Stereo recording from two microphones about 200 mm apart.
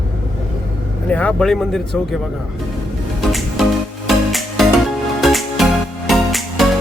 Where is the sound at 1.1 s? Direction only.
5° left (ahead or behind).